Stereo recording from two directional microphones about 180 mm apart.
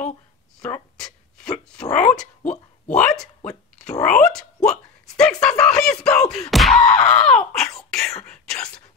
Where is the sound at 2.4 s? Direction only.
40° left (ahead or behind).